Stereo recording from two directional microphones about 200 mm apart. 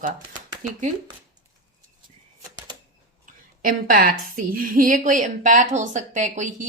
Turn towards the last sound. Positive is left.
turn(degrees=-40)  # may be behind; listen again after turning